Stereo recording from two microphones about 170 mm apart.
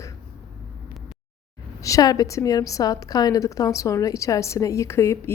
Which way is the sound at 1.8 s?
20° left (ahead or behind).